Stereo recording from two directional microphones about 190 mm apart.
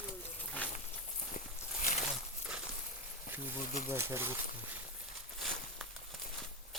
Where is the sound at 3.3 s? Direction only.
10° right (ahead or behind).